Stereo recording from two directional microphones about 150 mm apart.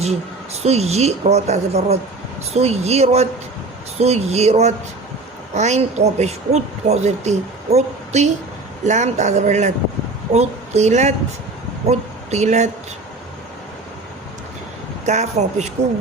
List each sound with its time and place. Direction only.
0.6 s speech: 45° right (ahead or behind)
15.0 s speech: 50° right (ahead or behind)